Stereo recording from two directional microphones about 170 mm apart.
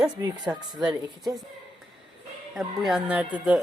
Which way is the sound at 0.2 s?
25° right (ahead or behind).